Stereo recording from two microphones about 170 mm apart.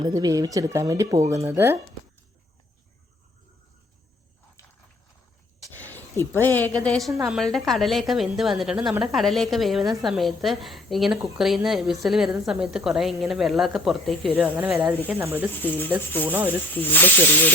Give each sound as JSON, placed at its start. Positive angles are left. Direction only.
{"t": 0.0, "sound": "speech", "side_deg": -20}
{"t": 5.7, "sound": "a woman's voice", "side_deg": 10}
{"t": 14.3, "sound": "speech", "side_deg": -10}
{"t": 15.6, "sound": "speech", "side_deg": 10}
{"t": 16.2, "sound": "speech", "side_deg": -10}
{"t": 16.7, "sound": "speech", "side_deg": 10}